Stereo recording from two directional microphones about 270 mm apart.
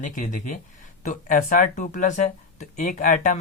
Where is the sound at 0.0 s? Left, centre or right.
Left.